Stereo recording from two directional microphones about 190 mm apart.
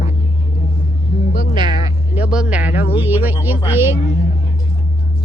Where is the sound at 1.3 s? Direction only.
50° left (ahead or behind).